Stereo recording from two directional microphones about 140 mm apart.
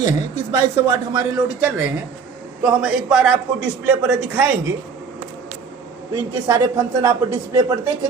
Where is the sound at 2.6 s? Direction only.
5° right (ahead or behind).